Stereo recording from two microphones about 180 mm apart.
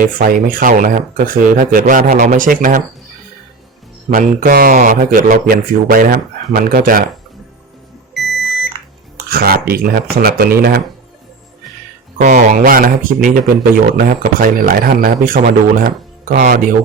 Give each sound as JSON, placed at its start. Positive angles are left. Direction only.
{"t": 0.0, "sound": "a man's voice", "side_deg": -50}
{"t": 4.1, "sound": "a man's voice", "side_deg": -50}
{"t": 8.2, "sound": "smoke detector", "side_deg": 0}
{"t": 9.1, "sound": "speech", "side_deg": -55}
{"t": 12.2, "sound": "a man's voice", "side_deg": -40}